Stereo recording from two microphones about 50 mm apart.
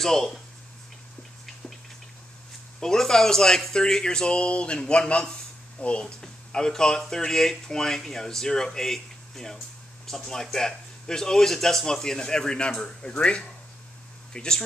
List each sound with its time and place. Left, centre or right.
0.0 s speech: centre
2.8 s speech: centre
6.2 s speech: centre